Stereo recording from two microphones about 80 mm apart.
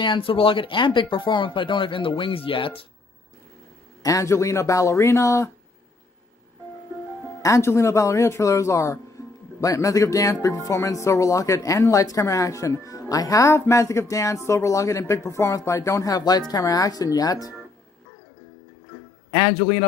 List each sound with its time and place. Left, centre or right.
0.0 s speech: left
4.0 s speech: left
7.4 s speech: left
19.3 s speech: left